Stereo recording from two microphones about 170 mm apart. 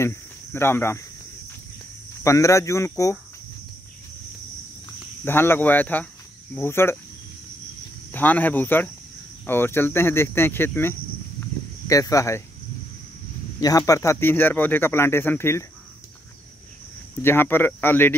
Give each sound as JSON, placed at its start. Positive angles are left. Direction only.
{"t": 0.0, "sound": "speech", "side_deg": 15}
{"t": 2.2, "sound": "speech", "side_deg": 20}
{"t": 5.2, "sound": "speech", "side_deg": 15}
{"t": 8.1, "sound": "speech", "side_deg": 10}
{"t": 13.6, "sound": "speech", "side_deg": 20}
{"t": 17.2, "sound": "speech", "side_deg": 15}